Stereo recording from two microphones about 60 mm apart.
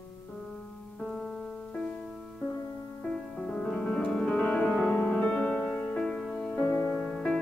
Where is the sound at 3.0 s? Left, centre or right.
Centre.